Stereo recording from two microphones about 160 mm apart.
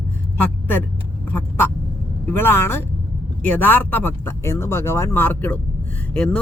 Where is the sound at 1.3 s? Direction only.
10° left (ahead or behind).